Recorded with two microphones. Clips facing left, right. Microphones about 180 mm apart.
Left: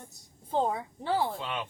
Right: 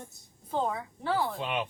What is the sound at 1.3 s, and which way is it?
Speech, 20° right (ahead or behind).